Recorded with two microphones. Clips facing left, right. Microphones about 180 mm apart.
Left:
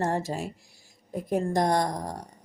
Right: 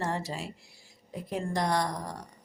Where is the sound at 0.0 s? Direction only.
45° left (ahead or behind).